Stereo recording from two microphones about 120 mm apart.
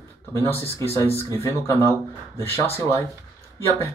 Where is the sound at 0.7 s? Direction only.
25° left (ahead or behind).